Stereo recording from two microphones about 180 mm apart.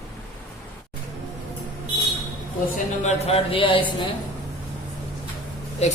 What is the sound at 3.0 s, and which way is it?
Speech, 35° left (ahead or behind).